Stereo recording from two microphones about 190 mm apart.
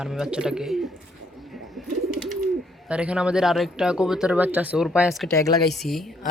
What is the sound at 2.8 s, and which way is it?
Speech, 5° right (ahead or behind).